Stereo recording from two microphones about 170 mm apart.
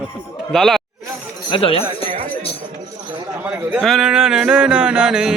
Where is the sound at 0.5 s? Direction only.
Centre (ahead or behind).